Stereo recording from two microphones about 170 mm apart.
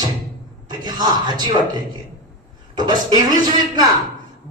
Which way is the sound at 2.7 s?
25° right (ahead or behind).